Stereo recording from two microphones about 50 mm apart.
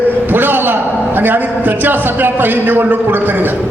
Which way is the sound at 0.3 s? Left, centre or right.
Right.